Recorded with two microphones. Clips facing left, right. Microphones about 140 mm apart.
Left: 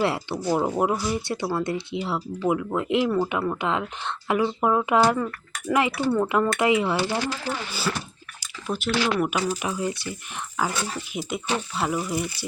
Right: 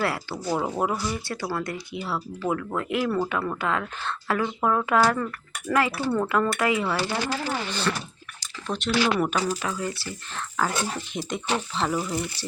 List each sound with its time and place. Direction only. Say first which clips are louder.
0.0 s speech: left 3 dB; 20° left (ahead or behind)
7.7 s speech: right 1 dB; 5° left (ahead or behind)
9.3 s speech: left 1 dB; 15° left (ahead or behind)
10.9 s speech: left 1 dB; 5° left (ahead or behind)